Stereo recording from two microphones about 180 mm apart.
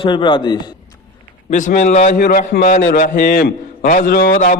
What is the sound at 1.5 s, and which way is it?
A man's voice, 45° left (ahead or behind).